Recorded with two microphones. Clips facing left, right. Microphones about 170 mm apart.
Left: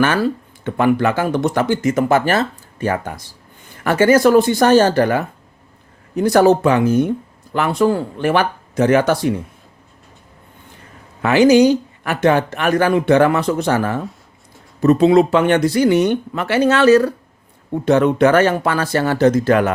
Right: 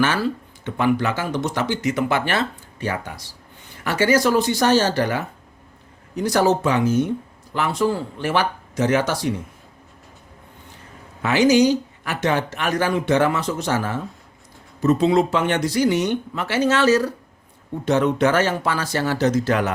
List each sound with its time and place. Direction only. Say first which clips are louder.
0.6 s speech: left 5 dB; 55° left (ahead or behind)
11.2 s speech: left 5 dB; 55° left (ahead or behind)